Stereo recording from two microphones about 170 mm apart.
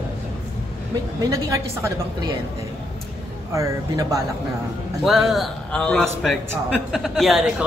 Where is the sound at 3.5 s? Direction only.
20° right (ahead or behind).